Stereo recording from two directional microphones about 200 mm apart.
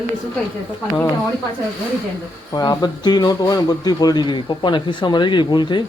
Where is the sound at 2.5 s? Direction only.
20° left (ahead or behind).